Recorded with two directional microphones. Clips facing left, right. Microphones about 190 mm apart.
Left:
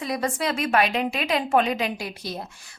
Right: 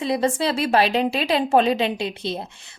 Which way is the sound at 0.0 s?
25° right (ahead or behind).